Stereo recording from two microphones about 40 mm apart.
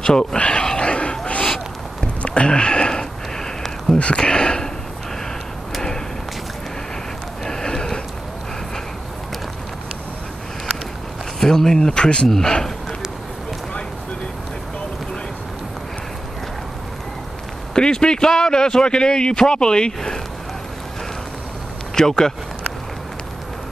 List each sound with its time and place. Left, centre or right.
0.0 s a man's voice: centre
0.4 s a sound: left
1.4 s crow: centre
2.2 s sniff: left; by 4.0 s centre
4.2 s speech: centre
7.4 s a sound: centre
11.3 s speech: centre
12.3 s speech: centre
17.7 s a man's voice: centre
21.9 s speech: centre